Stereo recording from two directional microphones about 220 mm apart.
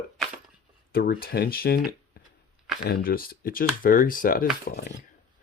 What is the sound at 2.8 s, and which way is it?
Speech, 40° left (ahead or behind).